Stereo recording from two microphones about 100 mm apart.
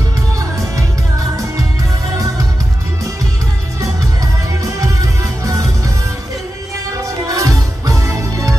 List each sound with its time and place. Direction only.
2.1 s music: 35° right (ahead or behind)
4.6 s music: 35° right (ahead or behind)
7.2 s music: 35° right (ahead or behind)